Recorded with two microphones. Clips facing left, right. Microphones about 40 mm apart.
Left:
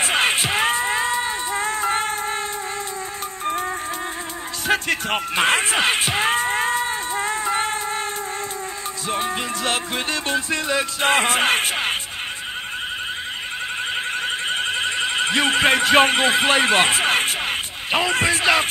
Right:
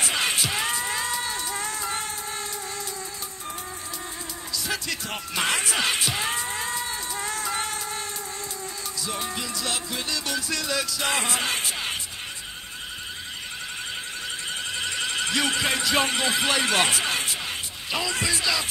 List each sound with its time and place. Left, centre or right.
0.0 s music: left
4.6 s music: left
9.1 s music: left
14.2 s a sound: left